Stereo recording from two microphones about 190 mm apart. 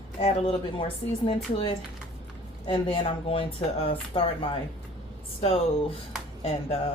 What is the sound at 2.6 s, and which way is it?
Speech, 30° left (ahead or behind).